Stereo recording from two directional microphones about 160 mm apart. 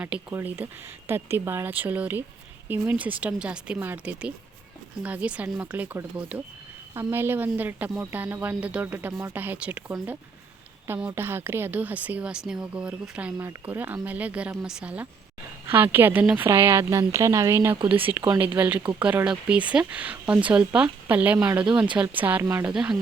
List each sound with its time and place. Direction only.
0.0 s a woman's voice: 10° right (ahead or behind)
17.7 s speech: 35° right (ahead or behind)
18.5 s a woman's voice: 10° right (ahead or behind)
22.7 s speech: 5° right (ahead or behind)